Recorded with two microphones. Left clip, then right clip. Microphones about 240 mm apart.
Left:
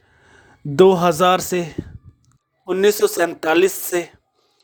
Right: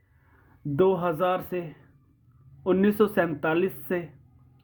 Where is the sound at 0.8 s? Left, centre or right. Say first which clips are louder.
Left 10 dB; left.